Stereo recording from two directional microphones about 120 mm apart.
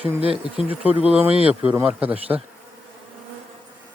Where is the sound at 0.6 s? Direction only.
15° right (ahead or behind).